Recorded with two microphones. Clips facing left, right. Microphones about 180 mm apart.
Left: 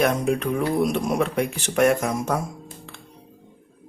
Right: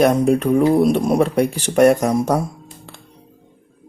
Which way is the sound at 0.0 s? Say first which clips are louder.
Right 7 dB; 35° right (ahead or behind).